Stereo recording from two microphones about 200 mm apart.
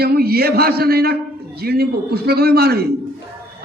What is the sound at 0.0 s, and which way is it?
A man's voice, 50° right (ahead or behind).